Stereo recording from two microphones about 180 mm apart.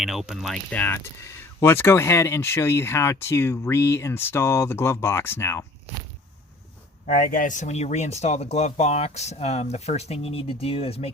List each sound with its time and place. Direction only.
0.0 s speech: centre (ahead or behind); by 5.6 s 15° left (ahead or behind)
7.2 s speech: 50° left (ahead or behind); by 11.1 s 35° left (ahead or behind)